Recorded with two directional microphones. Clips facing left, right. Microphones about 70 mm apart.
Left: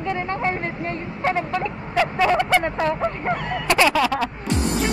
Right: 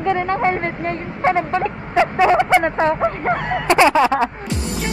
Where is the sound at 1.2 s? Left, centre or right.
Right.